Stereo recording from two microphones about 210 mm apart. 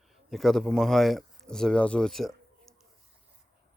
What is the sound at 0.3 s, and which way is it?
Speech, centre (ahead or behind).